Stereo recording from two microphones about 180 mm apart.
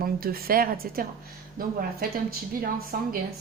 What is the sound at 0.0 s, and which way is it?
Speech, 55° right (ahead or behind).